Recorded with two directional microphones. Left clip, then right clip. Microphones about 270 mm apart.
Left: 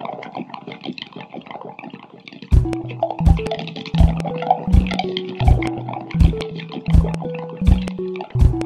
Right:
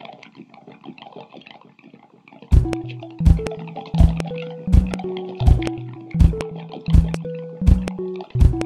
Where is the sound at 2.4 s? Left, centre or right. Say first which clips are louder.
Left 1 dB; centre.